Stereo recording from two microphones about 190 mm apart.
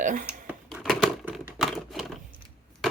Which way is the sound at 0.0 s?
45° right (ahead or behind).